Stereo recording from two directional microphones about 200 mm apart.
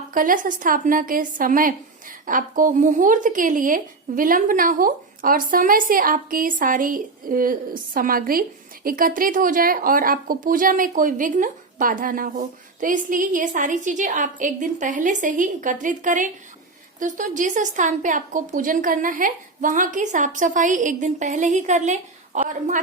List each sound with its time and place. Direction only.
0.1 s a woman's voice: 45° right (ahead or behind)